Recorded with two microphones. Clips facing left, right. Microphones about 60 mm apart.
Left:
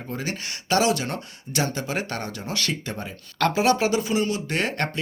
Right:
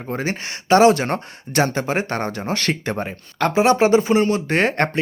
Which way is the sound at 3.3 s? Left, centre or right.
Right.